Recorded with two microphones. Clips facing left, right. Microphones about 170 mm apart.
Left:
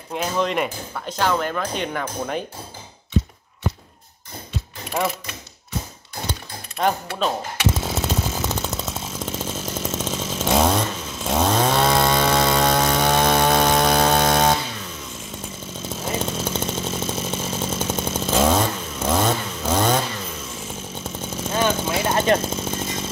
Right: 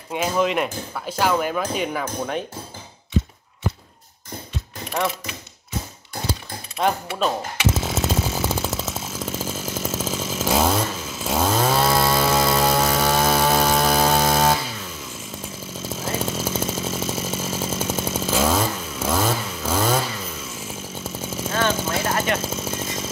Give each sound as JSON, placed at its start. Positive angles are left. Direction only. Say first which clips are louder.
{"t": 0.1, "sound": "speech", "louder": "right 2 dB", "side_deg": -5}
{"t": 6.8, "sound": "speech", "louder": "even", "side_deg": -5}
{"t": 7.7, "sound": "chainsaw", "louder": "right 1 dB", "side_deg": -5}
{"t": 15.9, "sound": "chainsaw", "louder": "even", "side_deg": -5}
{"t": 21.5, "sound": "vehicle", "louder": "left 1 dB", "side_deg": 10}
{"t": 22.0, "sound": "vehicle", "louder": "left 6 dB", "side_deg": 30}
{"t": 22.4, "sound": "a sound", "louder": "left 1 dB", "side_deg": -5}